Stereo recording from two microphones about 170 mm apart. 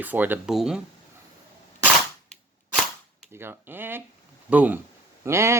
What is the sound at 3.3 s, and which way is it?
Speech, 15° right (ahead or behind).